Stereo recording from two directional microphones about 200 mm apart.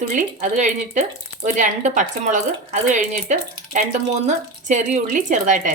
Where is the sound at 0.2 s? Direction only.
35° right (ahead or behind).